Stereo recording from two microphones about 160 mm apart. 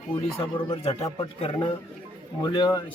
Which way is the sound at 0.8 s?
40° left (ahead or behind).